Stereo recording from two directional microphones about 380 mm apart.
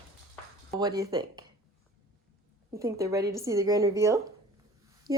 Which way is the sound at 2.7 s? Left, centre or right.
Centre.